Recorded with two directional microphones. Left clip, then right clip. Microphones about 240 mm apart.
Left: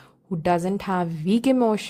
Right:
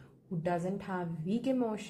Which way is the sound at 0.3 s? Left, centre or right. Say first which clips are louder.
Left 12 dB; left.